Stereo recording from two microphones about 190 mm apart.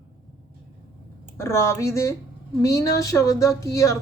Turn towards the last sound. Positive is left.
turn(degrees=15)  # may be behind; listen again after turning